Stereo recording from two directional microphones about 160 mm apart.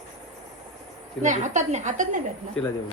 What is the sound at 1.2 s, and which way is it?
Speech, 50° right (ahead or behind).